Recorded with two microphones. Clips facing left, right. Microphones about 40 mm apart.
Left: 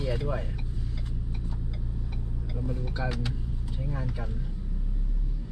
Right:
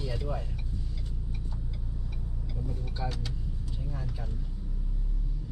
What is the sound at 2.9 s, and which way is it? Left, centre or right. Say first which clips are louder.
Speech: left 4 dB; left.